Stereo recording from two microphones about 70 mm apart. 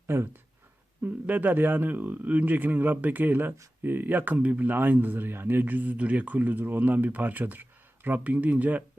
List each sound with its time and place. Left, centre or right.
0.1 s speech: right
1.0 s a man's voice: right